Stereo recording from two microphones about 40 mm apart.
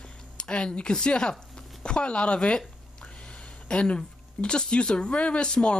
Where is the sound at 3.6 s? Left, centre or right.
Left.